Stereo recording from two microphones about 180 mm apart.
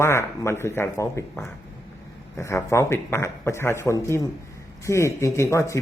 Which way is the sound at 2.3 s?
15° left (ahead or behind).